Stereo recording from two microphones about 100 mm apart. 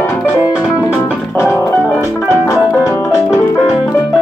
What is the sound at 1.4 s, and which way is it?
Music, 25° left (ahead or behind).